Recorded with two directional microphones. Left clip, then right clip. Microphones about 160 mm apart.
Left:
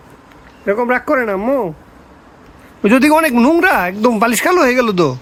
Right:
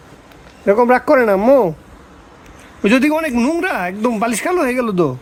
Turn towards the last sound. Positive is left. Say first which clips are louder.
# left 4 dB
turn(degrees=0)  # may be behind; listen again after turning